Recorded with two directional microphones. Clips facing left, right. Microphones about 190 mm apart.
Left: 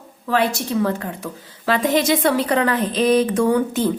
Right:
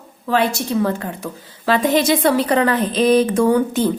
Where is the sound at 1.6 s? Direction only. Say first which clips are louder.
Right 2 dB; 35° right (ahead or behind).